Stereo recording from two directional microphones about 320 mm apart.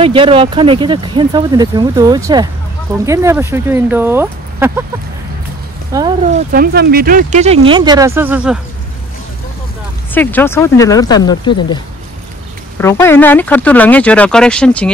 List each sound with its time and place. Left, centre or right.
0.0 s speech: centre
5.9 s speech: centre
6.5 s speech: right; by 8.5 s centre
10.1 s speech: centre